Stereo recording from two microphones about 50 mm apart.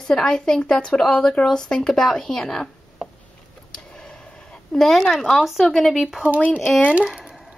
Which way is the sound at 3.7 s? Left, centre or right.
Centre.